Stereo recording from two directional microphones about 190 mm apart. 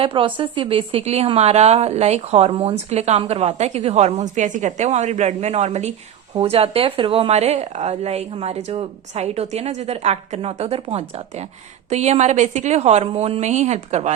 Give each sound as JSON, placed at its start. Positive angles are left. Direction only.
{"t": 0.0, "sound": "speech", "side_deg": -25}